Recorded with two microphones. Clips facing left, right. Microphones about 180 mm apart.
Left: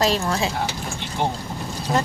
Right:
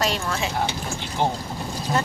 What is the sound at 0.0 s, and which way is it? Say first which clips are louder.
Speech: left 4 dB; 35° left (ahead or behind).